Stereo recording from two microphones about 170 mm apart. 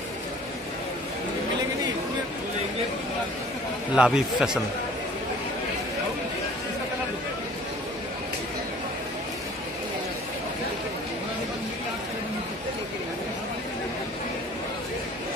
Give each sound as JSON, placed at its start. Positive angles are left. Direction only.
{"t": 3.9, "sound": "a man's voice", "side_deg": -5}